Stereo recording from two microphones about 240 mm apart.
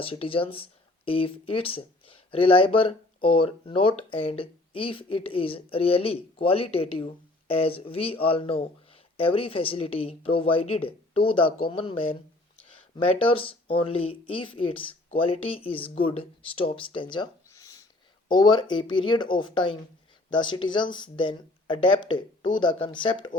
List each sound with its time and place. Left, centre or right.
0.0 s speech: left
13.1 s speech: left